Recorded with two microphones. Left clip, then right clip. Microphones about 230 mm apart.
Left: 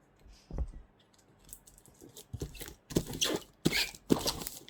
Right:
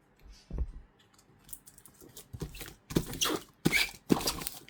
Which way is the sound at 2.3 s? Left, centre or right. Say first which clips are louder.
Even; centre.